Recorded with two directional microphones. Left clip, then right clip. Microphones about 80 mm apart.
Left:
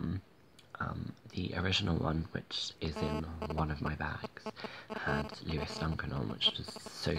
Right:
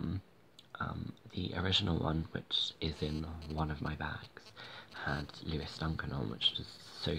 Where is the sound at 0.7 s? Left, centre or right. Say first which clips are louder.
Left 1 dB; centre.